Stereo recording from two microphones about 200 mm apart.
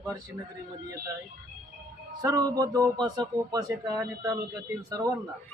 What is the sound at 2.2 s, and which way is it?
Speech, 20° right (ahead or behind).